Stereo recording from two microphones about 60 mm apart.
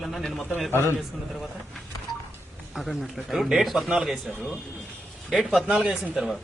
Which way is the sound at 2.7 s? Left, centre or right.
Centre.